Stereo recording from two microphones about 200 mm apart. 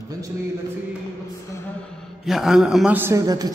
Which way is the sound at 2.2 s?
Centre (ahead or behind).